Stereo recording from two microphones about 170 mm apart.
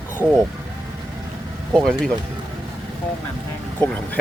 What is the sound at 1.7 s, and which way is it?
Speech, 5° left (ahead or behind).